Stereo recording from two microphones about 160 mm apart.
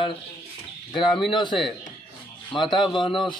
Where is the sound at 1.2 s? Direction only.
30° left (ahead or behind).